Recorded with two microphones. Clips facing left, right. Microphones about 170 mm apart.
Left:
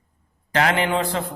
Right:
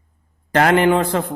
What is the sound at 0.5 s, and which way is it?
Speech, 50° right (ahead or behind).